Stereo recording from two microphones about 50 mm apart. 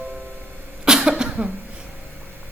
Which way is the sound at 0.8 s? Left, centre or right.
Centre.